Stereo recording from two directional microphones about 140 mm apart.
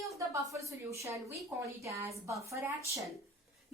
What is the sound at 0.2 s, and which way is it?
A woman's voice, 20° right (ahead or behind).